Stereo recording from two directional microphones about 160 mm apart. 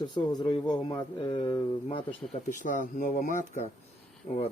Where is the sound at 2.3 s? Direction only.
55° left (ahead or behind).